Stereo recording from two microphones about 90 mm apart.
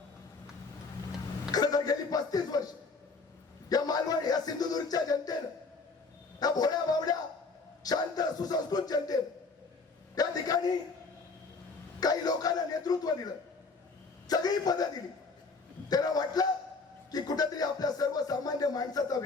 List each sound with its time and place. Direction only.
1.5 s music: 45° left (ahead or behind)
3.7 s speech: 45° left (ahead or behind)
6.4 s speech: 45° left (ahead or behind)
7.9 s music: 45° left (ahead or behind)
10.2 s a sound: 45° left (ahead or behind)
11.9 s music: 45° left (ahead or behind)
15.9 s music: 45° left (ahead or behind)